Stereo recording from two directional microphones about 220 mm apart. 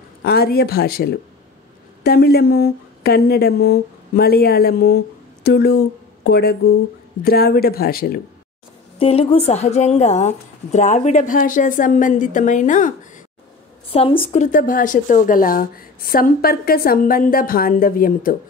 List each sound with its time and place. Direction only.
0.2 s speech: 45° left (ahead or behind)
8.9 s a woman's voice: 25° left (ahead or behind)